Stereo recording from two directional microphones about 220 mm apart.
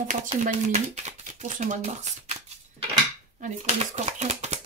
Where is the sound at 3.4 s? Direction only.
35° right (ahead or behind).